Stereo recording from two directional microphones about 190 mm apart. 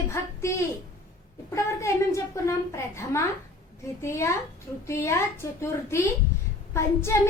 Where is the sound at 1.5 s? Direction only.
15° left (ahead or behind).